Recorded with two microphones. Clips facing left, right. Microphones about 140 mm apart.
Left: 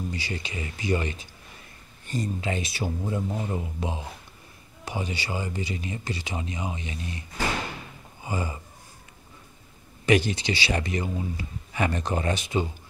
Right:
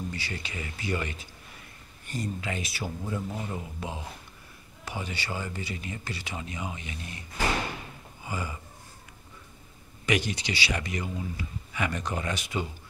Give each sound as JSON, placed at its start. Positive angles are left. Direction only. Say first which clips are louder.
{"t": 0.1, "sound": "speech", "louder": "left 4 dB", "side_deg": 20}
{"t": 8.2, "sound": "a sound", "louder": "left 4 dB", "side_deg": 25}
{"t": 10.0, "sound": "speech", "louder": "left 6 dB", "side_deg": 30}